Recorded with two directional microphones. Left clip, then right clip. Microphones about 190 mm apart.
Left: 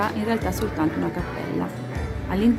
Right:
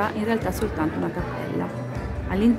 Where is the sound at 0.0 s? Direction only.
Centre (ahead or behind).